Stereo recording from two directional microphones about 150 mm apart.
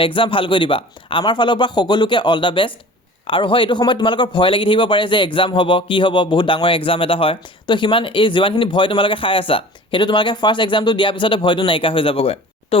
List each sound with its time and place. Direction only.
0.0 s a man's voice: 35° left (ahead or behind)